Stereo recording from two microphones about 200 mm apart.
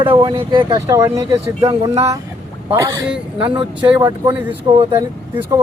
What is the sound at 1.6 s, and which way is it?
Speech, 25° right (ahead or behind).